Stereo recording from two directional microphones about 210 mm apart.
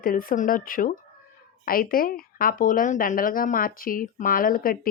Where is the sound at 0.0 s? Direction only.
40° left (ahead or behind).